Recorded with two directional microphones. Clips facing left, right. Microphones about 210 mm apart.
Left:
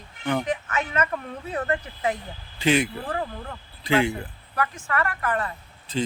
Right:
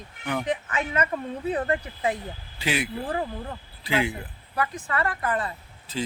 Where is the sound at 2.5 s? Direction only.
5° right (ahead or behind).